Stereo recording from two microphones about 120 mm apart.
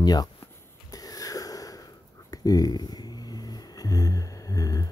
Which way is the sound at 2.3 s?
30° left (ahead or behind).